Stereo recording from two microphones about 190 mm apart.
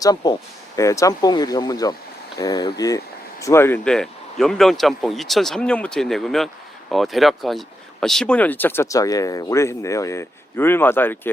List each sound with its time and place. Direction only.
0.0 s speech: 20° left (ahead or behind)